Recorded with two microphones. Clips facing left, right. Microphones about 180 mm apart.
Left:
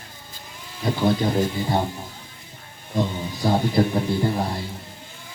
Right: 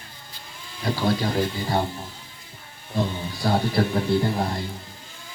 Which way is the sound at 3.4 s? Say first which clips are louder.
Left 2 dB; 15° left (ahead or behind).